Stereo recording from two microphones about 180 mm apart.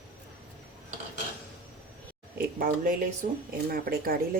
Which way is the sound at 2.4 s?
50° right (ahead or behind).